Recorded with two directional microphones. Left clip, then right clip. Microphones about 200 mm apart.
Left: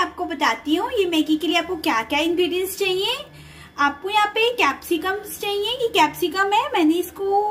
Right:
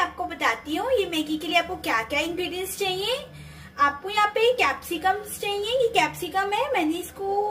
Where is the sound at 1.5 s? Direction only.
45° left (ahead or behind).